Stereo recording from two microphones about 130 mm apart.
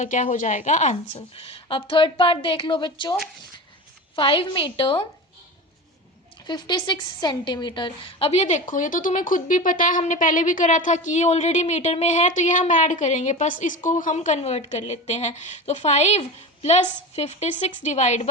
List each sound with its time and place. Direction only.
0.0 s a woman's voice: 70° left (ahead or behind); by 5.0 s 40° left (ahead or behind)
6.5 s a woman's voice: 35° left (ahead or behind); by 18.3 s 60° left (ahead or behind)